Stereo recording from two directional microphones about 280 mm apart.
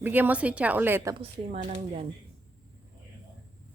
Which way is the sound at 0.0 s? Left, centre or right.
Centre.